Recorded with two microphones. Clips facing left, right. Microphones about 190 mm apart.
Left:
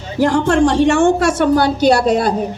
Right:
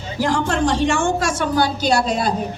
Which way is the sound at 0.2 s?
60° left (ahead or behind).